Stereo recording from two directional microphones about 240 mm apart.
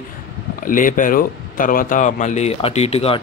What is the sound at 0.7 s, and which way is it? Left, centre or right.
Speech, left.